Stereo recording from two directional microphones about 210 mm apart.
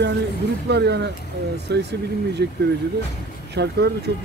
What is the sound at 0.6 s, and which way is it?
Speech, 55° right (ahead or behind).